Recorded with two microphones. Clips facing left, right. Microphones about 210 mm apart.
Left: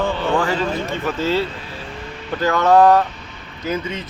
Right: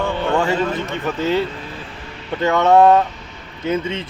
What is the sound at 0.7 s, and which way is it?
Speech, 20° right (ahead or behind).